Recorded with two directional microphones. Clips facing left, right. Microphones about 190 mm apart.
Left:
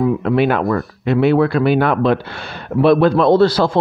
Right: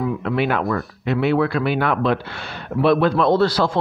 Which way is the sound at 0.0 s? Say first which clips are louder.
Left 6 dB; 40° left (ahead or behind).